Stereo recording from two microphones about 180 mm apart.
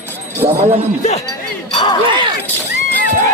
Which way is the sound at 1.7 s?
25° left (ahead or behind).